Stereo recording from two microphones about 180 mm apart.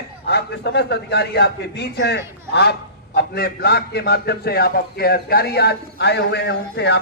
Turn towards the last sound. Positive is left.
turn(degrees=65)  # may be behind; listen again after turning